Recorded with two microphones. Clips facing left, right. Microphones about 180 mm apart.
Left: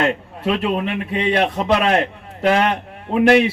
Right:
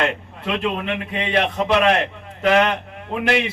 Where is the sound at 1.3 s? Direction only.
40° left (ahead or behind).